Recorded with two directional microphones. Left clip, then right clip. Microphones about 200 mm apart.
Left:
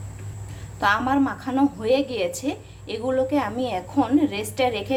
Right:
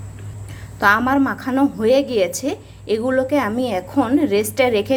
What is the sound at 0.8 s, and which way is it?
A woman's voice, 25° right (ahead or behind).